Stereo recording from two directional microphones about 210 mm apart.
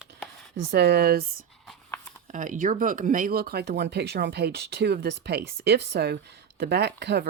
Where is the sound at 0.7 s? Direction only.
50° right (ahead or behind).